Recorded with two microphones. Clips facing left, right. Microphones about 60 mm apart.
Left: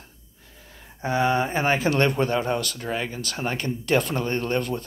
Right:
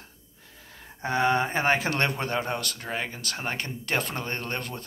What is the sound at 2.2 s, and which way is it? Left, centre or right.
Speech, right.